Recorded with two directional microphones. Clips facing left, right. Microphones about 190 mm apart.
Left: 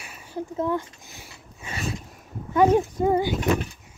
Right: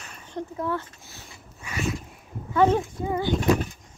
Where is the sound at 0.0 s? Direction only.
5° left (ahead or behind).